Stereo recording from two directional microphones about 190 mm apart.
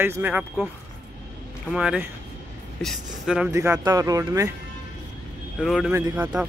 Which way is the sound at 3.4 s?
15° right (ahead or behind).